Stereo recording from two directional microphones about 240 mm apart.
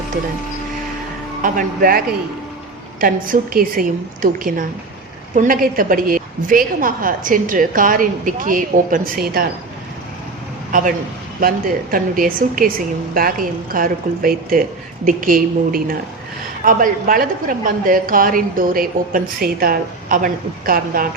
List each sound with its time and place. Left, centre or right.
1.4 s a woman's voice: right
10.7 s a woman's voice: right